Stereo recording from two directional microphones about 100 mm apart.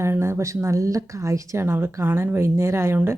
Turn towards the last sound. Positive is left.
turn(degrees=-25)  # may be behind; listen again after turning